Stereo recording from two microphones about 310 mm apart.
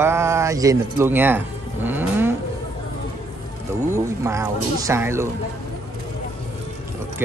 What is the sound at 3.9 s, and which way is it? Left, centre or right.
Speech, centre.